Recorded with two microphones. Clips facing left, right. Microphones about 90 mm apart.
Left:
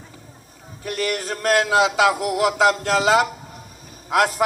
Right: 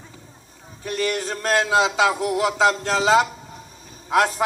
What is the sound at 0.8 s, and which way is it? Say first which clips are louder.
A man's voice: even; 25° right (ahead or behind).